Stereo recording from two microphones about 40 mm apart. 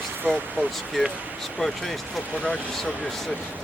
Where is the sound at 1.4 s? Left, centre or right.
Centre.